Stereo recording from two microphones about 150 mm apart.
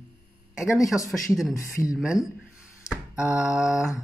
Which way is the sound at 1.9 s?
5° right (ahead or behind).